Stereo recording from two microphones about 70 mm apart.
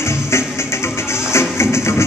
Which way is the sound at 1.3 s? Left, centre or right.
Left.